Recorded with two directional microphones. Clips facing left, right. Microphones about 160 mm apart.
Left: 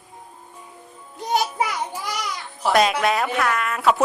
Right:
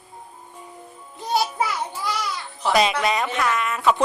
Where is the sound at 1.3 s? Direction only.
15° left (ahead or behind).